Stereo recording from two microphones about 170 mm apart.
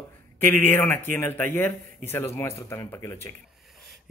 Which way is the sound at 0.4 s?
10° left (ahead or behind).